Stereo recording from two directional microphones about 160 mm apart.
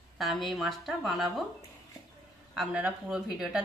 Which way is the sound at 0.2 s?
Centre (ahead or behind).